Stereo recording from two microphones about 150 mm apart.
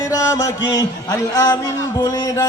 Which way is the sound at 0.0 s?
20° left (ahead or behind).